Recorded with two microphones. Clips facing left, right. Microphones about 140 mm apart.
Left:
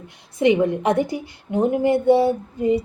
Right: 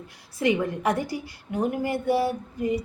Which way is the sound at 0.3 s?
20° left (ahead or behind).